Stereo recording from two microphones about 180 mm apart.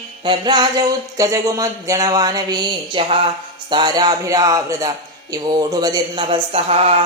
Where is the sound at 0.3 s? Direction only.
25° right (ahead or behind).